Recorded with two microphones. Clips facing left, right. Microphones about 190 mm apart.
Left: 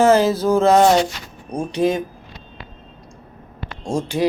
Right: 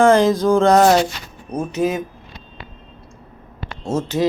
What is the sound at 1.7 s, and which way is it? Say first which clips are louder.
Speech: left 2 dB; 30° left (ahead or behind).